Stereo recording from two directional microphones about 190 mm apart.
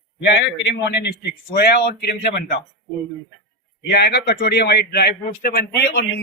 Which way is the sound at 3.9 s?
60° left (ahead or behind).